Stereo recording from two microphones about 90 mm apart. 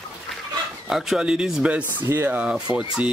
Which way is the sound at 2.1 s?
20° right (ahead or behind).